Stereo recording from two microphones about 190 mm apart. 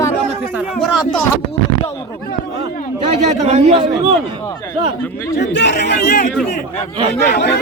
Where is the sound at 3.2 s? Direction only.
35° right (ahead or behind).